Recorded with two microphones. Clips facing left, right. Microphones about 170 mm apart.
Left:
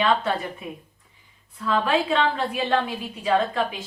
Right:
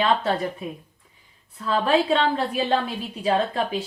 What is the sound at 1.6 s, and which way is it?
Speech, 30° right (ahead or behind).